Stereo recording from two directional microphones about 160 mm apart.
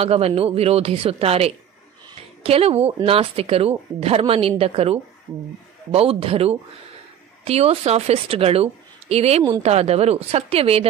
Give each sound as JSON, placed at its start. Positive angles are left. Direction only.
{"t": 0.0, "sound": "a woman's voice", "side_deg": -40}